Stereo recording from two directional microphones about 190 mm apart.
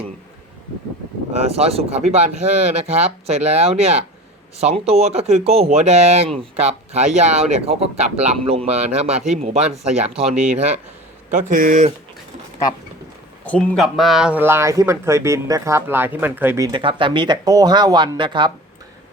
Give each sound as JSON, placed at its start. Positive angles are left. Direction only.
{"t": 1.5, "sound": "speech", "side_deg": -35}
{"t": 9.6, "sound": "speech", "side_deg": -5}
{"t": 10.0, "sound": "speech", "side_deg": -30}
{"t": 10.3, "sound": "speech", "side_deg": -5}
{"t": 11.3, "sound": "a man's voice", "side_deg": -40}
{"t": 13.4, "sound": "speech", "side_deg": 5}